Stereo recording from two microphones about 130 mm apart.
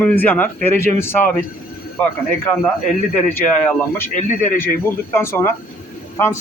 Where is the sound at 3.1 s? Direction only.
15° left (ahead or behind).